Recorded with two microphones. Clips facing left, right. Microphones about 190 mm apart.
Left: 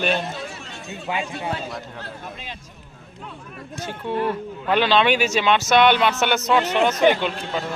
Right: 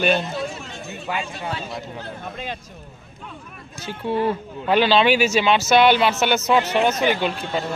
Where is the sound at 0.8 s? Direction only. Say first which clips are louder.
Left 1 dB; 20° left (ahead or behind).